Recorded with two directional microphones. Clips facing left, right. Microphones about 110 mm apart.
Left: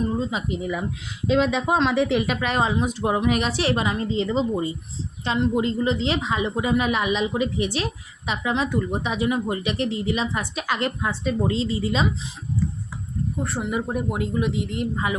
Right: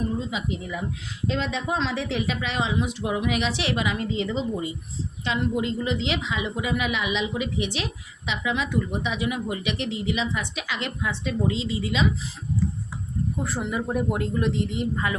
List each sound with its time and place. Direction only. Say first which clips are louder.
0.0 s a sound: left 3 dB; 40° left (ahead or behind)
1.3 s a woman's voice: left 7 dB; 70° left (ahead or behind); by 12.0 s 40° left (ahead or behind)
13.4 s speech: left 3 dB; 5° right (ahead or behind)
13.7 s speech: right 1 dB; 15° left (ahead or behind)